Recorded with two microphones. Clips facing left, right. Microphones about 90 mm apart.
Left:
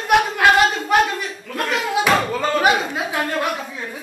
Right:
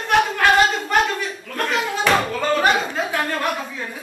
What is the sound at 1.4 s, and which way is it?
Speech, 5° left (ahead or behind).